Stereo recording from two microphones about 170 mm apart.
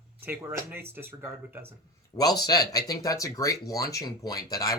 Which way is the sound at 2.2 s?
25° left (ahead or behind).